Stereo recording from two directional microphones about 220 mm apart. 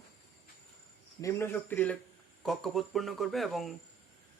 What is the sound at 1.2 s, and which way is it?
Speech, 10° left (ahead or behind).